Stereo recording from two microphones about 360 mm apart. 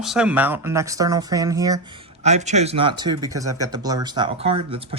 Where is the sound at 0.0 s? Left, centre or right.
Centre.